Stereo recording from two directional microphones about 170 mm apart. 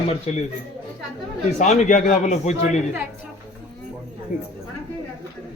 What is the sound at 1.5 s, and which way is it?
A man's voice, 45° left (ahead or behind).